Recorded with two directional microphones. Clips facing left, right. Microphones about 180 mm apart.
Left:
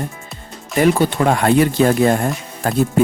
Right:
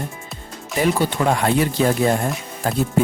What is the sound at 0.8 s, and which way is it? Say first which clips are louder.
Speech: left 4 dB; 60° left (ahead or behind).